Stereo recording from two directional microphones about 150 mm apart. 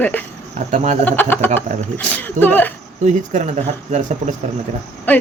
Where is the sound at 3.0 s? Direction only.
50° right (ahead or behind).